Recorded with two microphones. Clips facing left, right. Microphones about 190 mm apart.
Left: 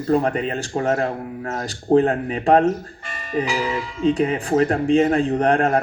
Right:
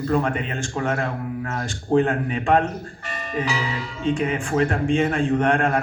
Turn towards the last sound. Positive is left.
turn(degrees=35)  # may be behind; listen again after turning